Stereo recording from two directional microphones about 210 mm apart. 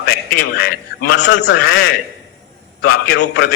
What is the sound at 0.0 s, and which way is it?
A man's voice, 45° left (ahead or behind).